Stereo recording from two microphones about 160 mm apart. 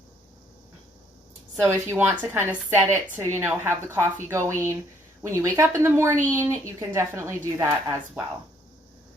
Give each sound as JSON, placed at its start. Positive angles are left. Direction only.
{"t": 1.6, "sound": "a woman's voice", "side_deg": -15}